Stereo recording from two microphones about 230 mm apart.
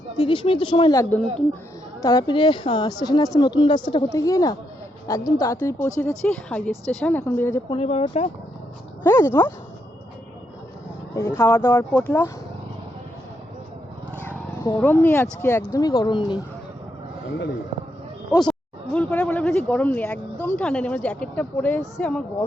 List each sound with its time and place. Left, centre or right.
0.2 s speech: left
7.7 s speech: left
9.0 s speech: centre
11.1 s speech: centre
14.3 s speech: centre
18.3 s speech: centre